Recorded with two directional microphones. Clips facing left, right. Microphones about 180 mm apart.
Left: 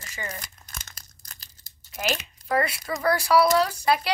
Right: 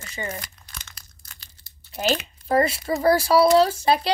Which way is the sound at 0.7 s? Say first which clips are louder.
Even; 45° left (ahead or behind).